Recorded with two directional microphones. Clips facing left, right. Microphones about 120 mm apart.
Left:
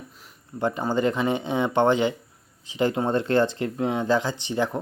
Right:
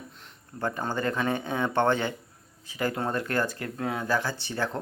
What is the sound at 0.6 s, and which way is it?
Speech, 15° left (ahead or behind).